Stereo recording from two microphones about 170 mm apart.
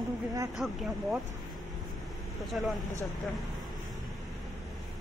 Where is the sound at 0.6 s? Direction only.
Centre (ahead or behind).